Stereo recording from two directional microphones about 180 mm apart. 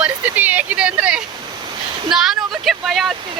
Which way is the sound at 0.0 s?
10° right (ahead or behind).